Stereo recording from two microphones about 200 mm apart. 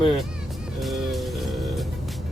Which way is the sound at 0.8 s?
Centre (ahead or behind).